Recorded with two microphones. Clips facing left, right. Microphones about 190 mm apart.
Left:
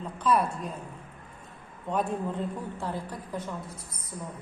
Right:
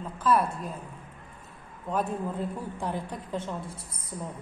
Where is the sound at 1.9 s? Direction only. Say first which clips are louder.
Even; centre (ahead or behind).